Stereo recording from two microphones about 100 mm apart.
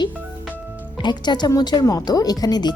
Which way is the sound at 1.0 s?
45° left (ahead or behind).